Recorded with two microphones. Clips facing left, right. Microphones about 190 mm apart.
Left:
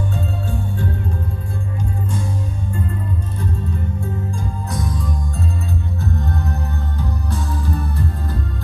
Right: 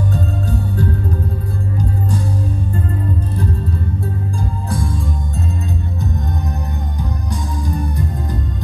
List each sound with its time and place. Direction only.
0.1 s music: 40° right (ahead or behind)
4.4 s music: 30° right (ahead or behind)